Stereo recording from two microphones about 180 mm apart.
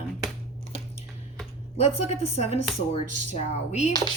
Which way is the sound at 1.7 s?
35° left (ahead or behind).